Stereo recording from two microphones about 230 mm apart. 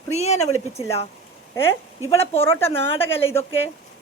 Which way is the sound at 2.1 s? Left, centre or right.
Left.